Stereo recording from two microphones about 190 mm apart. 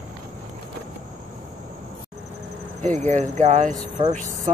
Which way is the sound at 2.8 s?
40° right (ahead or behind).